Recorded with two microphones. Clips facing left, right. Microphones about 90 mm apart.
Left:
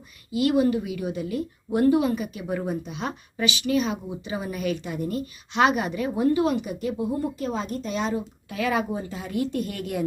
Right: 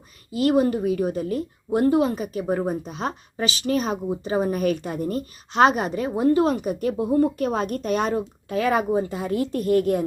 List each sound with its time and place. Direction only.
0.3 s a woman's voice: 40° right (ahead or behind)
1.7 s a woman's voice: 30° right (ahead or behind); by 9.3 s 55° right (ahead or behind)
9.3 s speech: 40° right (ahead or behind)